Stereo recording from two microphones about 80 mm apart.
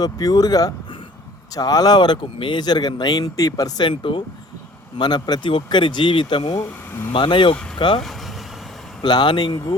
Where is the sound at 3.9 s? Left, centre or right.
Left.